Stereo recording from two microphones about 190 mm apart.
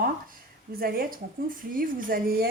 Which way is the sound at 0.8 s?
50° right (ahead or behind).